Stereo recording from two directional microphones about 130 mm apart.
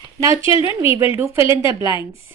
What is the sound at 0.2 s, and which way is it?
A woman's voice, 25° right (ahead or behind).